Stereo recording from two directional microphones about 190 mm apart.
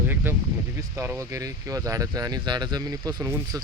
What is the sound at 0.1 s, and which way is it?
Speech, 10° right (ahead or behind).